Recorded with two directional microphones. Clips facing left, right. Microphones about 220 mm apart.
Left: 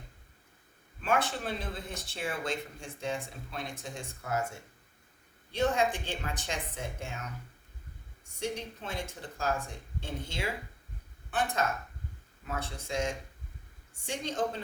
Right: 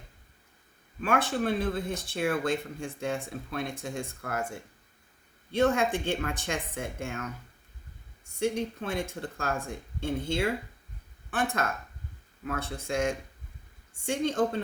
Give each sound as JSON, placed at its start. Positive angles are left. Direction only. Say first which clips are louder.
{"t": 1.0, "sound": "speech", "louder": "right 4 dB", "side_deg": -55}
{"t": 8.4, "sound": "speech", "louder": "right 7 dB", "side_deg": -55}